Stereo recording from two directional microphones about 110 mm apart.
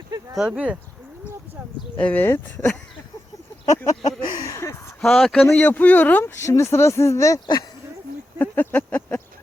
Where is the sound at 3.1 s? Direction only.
35° left (ahead or behind).